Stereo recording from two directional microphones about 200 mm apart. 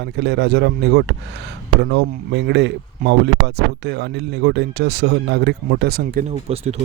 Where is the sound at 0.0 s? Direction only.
60° right (ahead or behind).